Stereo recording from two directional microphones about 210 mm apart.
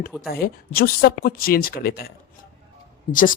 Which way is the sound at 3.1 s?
40° left (ahead or behind).